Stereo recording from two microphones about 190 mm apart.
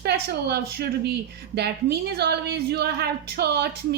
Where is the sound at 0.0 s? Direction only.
60° right (ahead or behind).